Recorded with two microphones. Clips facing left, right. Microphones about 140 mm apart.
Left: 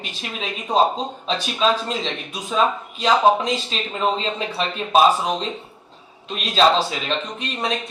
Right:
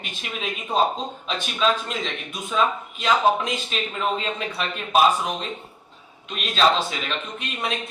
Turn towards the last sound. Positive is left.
turn(degrees=35)  # may be behind; listen again after turning